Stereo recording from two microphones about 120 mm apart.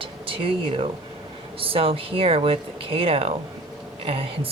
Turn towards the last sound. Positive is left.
turn(degrees=-55)  # may be behind; listen again after turning